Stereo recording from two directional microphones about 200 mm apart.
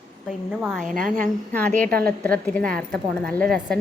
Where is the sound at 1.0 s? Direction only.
45° right (ahead or behind).